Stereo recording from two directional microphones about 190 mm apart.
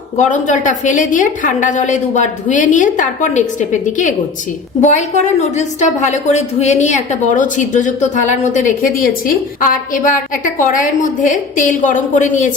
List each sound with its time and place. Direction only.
0.2 s a woman's voice: 40° left (ahead or behind)